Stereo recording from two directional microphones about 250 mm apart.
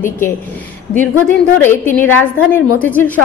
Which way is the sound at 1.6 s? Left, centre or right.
Centre.